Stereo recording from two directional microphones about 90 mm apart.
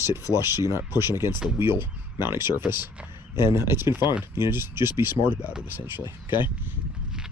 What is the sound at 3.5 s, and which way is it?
Speech, 30° right (ahead or behind).